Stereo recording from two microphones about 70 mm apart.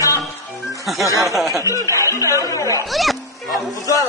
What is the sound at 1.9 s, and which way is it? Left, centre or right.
Speech, left.